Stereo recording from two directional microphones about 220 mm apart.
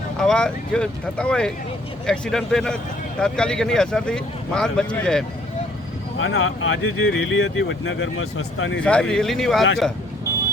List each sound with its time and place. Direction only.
0.2 s speech: 5° left (ahead or behind)
6.1 s speech: 65° left (ahead or behind)
8.8 s speech: 5° left (ahead or behind)